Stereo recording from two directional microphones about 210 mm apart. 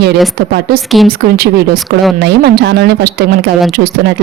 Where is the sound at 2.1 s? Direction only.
50° right (ahead or behind).